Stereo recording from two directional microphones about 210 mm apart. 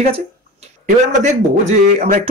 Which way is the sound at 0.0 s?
30° right (ahead or behind).